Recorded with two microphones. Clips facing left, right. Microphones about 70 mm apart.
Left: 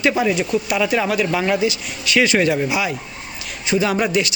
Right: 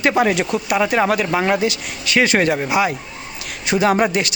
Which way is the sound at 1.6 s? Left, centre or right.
Right.